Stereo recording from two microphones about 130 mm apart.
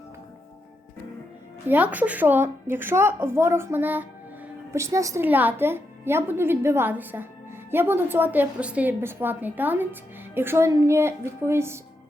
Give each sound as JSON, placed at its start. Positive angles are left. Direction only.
{"t": 1.6, "sound": "a woman's voice", "side_deg": -15}